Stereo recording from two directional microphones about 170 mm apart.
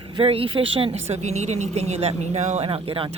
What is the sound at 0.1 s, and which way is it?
Speech, 35° right (ahead or behind).